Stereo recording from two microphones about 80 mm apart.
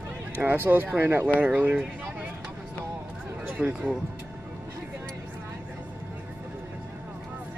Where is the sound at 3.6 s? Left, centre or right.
Centre.